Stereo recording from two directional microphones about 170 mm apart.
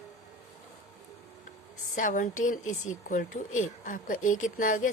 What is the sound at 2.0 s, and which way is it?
Speech, 50° left (ahead or behind).